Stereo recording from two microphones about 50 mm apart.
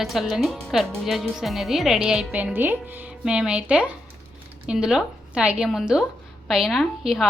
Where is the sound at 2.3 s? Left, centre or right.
Right.